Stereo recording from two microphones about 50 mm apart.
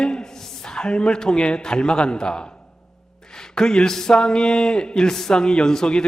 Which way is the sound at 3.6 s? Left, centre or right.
Centre.